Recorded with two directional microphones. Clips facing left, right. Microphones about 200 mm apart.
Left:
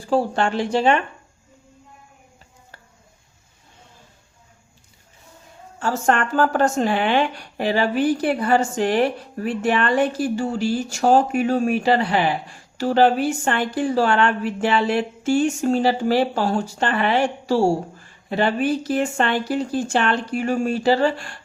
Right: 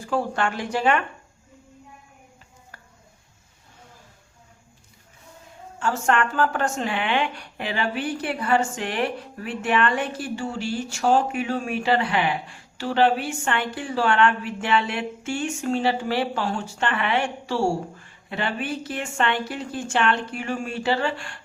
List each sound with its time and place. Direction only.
0.0 s speech: 30° left (ahead or behind)
5.8 s speech: 40° left (ahead or behind)